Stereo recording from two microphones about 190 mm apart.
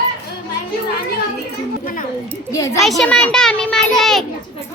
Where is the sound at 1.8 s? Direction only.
45° left (ahead or behind).